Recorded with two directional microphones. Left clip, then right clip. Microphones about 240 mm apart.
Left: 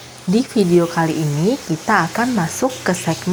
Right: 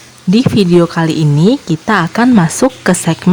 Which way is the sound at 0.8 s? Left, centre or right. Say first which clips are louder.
Right 5 dB; right.